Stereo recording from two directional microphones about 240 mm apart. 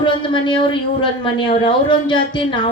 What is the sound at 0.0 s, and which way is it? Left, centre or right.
A man's voice, left.